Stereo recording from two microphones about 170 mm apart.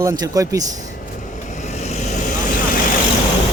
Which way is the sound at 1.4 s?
45° left (ahead or behind).